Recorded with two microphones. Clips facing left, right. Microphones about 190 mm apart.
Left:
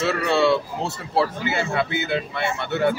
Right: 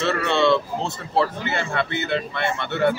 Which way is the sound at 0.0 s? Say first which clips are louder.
Even; 5° left (ahead or behind).